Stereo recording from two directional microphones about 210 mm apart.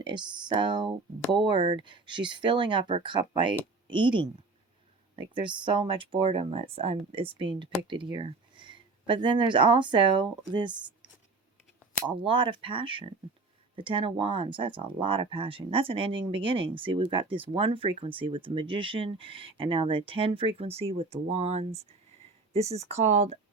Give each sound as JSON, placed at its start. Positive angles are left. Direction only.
{"t": 0.0, "sound": "speech", "side_deg": -20}
{"t": 12.0, "sound": "speech", "side_deg": -25}